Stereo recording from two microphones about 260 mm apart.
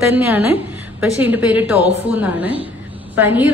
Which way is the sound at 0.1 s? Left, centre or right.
Centre.